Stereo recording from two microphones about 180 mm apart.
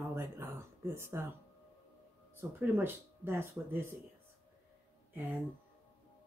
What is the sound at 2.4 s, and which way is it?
Speech, 10° right (ahead or behind).